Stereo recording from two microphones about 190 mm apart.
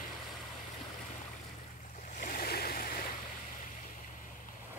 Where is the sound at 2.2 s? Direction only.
50° left (ahead or behind).